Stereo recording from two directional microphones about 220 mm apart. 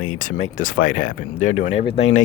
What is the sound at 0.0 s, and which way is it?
Speech, 35° left (ahead or behind).